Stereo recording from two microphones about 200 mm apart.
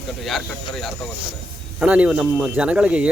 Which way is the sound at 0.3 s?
Centre (ahead or behind).